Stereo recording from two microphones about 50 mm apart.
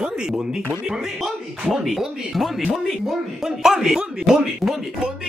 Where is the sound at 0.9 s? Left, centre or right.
Centre.